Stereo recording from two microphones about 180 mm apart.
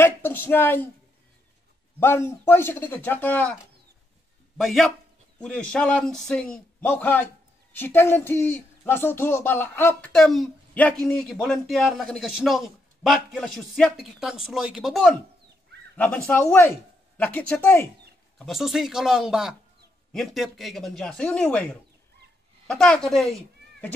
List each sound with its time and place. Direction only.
0.0 s speech: 10° left (ahead or behind)
2.0 s a man's voice: 15° left (ahead or behind)
4.6 s a man's voice: centre (ahead or behind)
10.1 s a man's voice: centre (ahead or behind)
18.4 s speech: centre (ahead or behind)
22.7 s speech: 5° left (ahead or behind)